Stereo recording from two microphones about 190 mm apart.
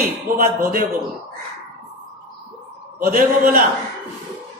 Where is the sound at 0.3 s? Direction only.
50° right (ahead or behind).